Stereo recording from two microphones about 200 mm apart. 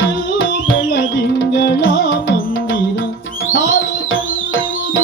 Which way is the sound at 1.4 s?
60° left (ahead or behind).